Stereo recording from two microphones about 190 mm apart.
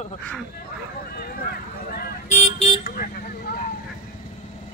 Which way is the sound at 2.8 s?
50° left (ahead or behind).